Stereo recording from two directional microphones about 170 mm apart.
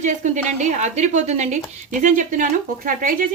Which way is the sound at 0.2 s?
45° right (ahead or behind).